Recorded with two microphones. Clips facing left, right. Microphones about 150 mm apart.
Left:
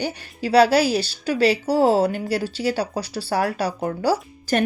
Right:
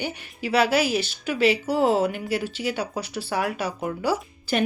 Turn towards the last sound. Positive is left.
turn(degrees=40)  # may be behind; listen again after turning